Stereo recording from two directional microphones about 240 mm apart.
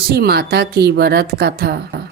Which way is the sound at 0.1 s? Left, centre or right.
Right.